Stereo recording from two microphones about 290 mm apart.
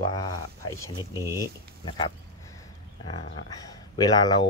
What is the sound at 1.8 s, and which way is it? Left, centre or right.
Speech, centre.